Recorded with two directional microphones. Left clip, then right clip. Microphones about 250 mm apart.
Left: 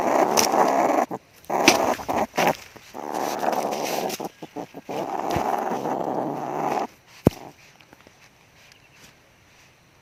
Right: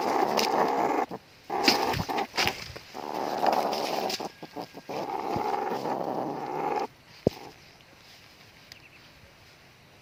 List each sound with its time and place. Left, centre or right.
0.0 s dog: left